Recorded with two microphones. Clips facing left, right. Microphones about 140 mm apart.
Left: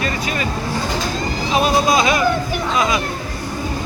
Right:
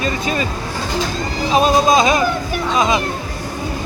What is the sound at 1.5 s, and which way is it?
Speech, 25° right (ahead or behind).